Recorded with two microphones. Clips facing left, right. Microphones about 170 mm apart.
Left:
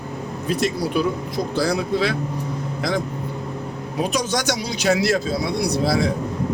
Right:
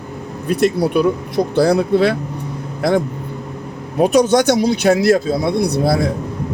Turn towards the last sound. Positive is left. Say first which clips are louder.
# right 4 dB
turn(degrees=-55)  # may be behind; listen again after turning